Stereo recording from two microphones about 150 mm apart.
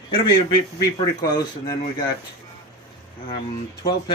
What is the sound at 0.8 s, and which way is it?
Speech, 25° left (ahead or behind).